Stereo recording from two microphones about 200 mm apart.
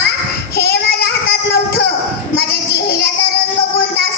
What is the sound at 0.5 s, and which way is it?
Child singing, 50° left (ahead or behind).